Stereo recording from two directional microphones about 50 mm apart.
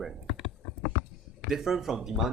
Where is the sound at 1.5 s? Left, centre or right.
Centre.